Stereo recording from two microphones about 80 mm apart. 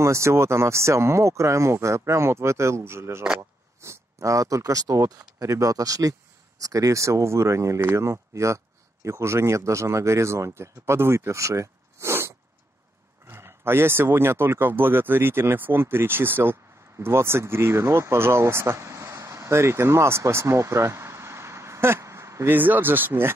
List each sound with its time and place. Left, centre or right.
0.0 s speech: right